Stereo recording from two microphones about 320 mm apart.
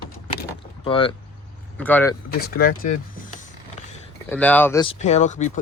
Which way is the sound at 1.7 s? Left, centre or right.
Centre.